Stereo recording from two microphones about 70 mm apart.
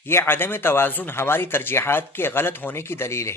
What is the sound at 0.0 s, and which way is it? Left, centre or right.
Speech, left.